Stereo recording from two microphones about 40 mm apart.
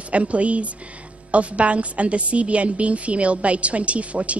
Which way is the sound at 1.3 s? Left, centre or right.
Right.